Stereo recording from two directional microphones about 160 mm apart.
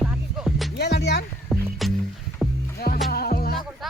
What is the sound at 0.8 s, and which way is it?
Speech, 90° left.